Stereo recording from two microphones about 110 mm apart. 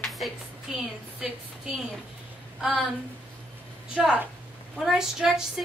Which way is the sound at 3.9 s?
10° right (ahead or behind).